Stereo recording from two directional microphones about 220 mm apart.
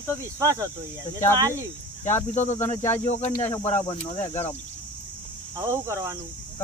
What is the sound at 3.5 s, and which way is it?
Speech, 10° left (ahead or behind).